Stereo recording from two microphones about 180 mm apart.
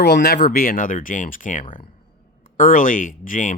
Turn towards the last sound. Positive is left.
turn(degrees=50)  # may be behind; listen again after turning